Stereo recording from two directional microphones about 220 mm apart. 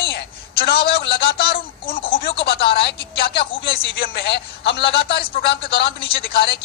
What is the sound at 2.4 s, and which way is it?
A woman's voice, 45° left (ahead or behind).